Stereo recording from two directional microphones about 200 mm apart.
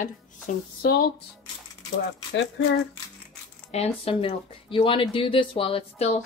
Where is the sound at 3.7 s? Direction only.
30° left (ahead or behind).